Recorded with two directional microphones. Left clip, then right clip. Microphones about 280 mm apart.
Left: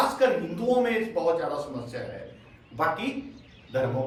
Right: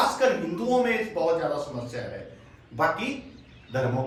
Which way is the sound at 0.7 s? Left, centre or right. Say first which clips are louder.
Even; centre.